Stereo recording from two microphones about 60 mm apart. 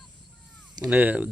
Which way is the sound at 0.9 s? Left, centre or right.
Right.